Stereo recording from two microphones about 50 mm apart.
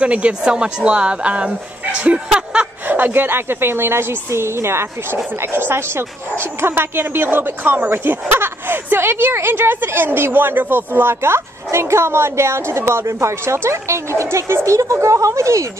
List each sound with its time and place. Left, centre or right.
0.0 s a woman's voice: right
2.2 s a sound: centre
2.9 s a woman's voice: right